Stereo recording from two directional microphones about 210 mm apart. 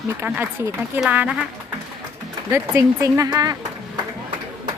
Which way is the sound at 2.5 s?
15° right (ahead or behind).